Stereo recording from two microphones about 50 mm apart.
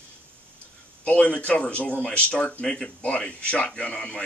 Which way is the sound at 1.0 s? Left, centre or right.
Left.